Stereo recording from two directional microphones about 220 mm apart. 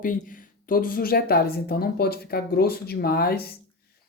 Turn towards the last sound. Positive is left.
turn(degrees=45)  # may be behind; listen again after turning